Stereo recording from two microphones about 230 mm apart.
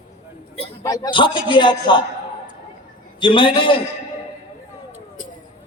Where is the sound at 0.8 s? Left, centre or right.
Centre.